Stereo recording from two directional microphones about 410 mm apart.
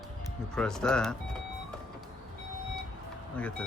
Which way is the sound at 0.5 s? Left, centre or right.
Centre.